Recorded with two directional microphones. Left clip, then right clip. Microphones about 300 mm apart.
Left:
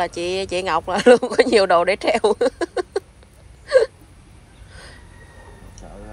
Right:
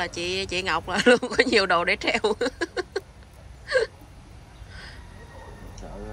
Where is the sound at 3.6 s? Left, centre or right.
Centre.